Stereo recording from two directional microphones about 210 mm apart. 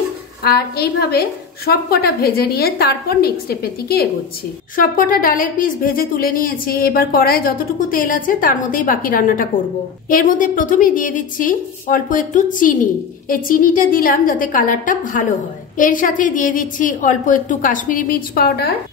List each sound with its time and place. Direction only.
0.4 s a woman's voice: 50° left (ahead or behind)